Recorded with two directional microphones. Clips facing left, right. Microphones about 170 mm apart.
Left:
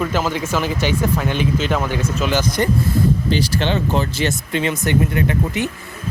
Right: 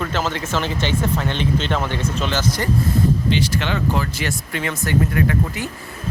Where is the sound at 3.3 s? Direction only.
30° left (ahead or behind).